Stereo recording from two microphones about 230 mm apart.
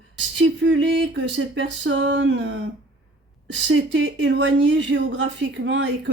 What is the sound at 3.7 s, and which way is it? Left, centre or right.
A woman's voice, right.